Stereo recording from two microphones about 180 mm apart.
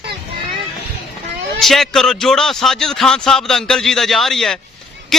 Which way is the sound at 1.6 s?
Centre (ahead or behind).